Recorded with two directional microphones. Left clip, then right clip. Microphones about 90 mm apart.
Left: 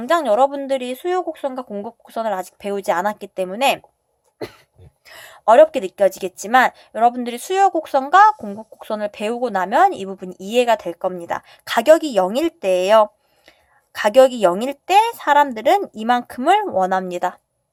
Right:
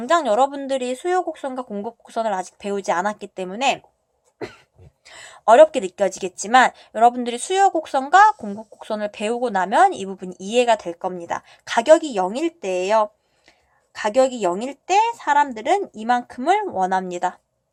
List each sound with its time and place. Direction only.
0.0 s speech: 20° left (ahead or behind)
5.0 s a sound: 20° left (ahead or behind)
5.5 s a woman's voice: 5° left (ahead or behind); by 17.4 s 35° left (ahead or behind)